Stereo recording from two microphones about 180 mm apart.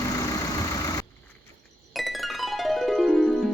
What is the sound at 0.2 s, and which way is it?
Vehicle, 20° left (ahead or behind).